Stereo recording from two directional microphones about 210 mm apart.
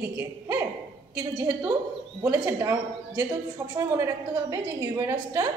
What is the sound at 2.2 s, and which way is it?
A woman's voice, 10° right (ahead or behind).